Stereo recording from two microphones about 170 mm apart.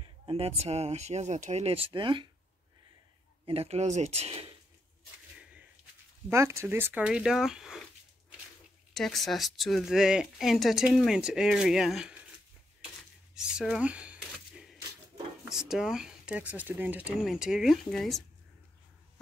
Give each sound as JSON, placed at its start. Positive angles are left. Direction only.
{"t": 0.0, "sound": "speech", "side_deg": -30}
{"t": 3.4, "sound": "speech", "side_deg": -35}
{"t": 6.3, "sound": "speech", "side_deg": -15}
{"t": 8.9, "sound": "speech", "side_deg": 0}
{"t": 13.3, "sound": "speech", "side_deg": -5}
{"t": 15.7, "sound": "speech", "side_deg": -5}